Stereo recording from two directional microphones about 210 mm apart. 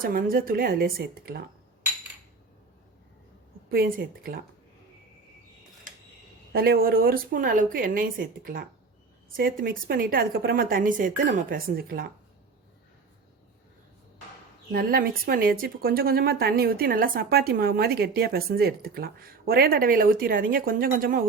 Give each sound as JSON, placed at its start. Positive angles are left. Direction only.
{"t": 0.0, "sound": "a woman's voice", "side_deg": -45}
{"t": 3.7, "sound": "a woman's voice", "side_deg": -45}
{"t": 6.5, "sound": "a woman's voice", "side_deg": -45}
{"t": 14.7, "sound": "a woman's voice", "side_deg": -45}